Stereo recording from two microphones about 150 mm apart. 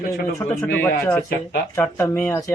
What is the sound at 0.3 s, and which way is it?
Speech, 20° left (ahead or behind).